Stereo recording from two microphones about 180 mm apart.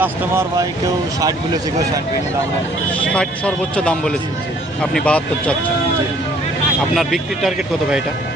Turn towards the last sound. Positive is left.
turn(degrees=0)  # may be behind; listen again after turning